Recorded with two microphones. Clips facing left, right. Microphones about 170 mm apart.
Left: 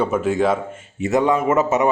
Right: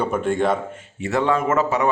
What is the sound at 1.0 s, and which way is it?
Speech, 15° left (ahead or behind).